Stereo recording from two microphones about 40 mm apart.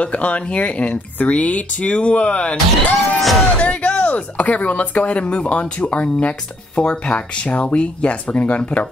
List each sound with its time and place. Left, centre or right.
0.0 s speech: left
3.0 s music: centre
3.5 s speech: left